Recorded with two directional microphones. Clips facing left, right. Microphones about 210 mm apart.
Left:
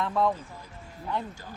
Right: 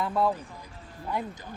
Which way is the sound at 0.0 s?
5° right (ahead or behind).